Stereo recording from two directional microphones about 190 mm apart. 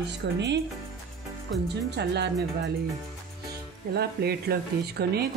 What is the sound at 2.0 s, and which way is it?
Speech, 60° right (ahead or behind).